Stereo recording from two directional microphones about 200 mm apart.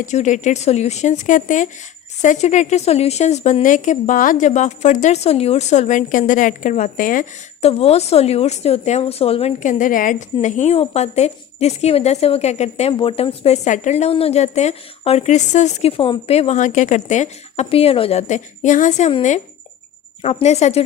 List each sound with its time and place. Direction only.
0.0 s speech: 35° left (ahead or behind)